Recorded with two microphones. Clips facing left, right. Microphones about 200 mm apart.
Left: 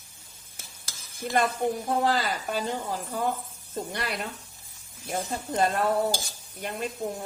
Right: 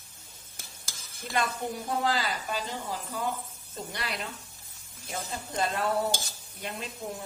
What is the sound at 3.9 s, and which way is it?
Speech, 50° left (ahead or behind).